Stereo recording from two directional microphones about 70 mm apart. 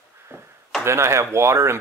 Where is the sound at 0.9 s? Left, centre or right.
Right.